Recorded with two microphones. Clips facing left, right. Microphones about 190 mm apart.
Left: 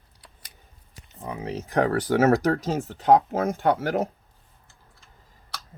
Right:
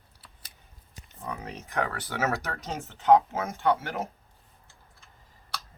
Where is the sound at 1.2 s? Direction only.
30° left (ahead or behind).